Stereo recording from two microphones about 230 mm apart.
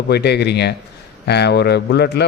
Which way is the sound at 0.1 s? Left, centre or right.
Left.